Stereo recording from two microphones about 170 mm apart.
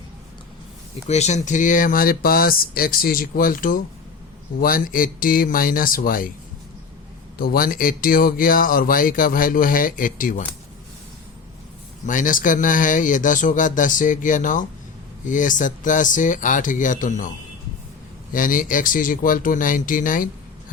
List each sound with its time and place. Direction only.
1.0 s speech: 40° left (ahead or behind)
7.3 s speech: 60° left (ahead or behind)
12.0 s speech: 50° left (ahead or behind)
18.3 s speech: 55° left (ahead or behind)